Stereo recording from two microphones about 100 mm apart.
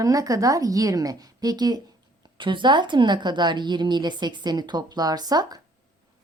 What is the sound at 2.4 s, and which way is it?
A woman's voice, 55° right (ahead or behind).